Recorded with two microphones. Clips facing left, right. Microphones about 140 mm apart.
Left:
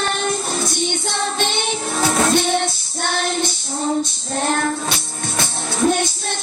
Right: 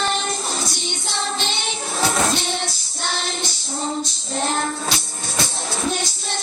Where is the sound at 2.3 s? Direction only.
55° left (ahead or behind).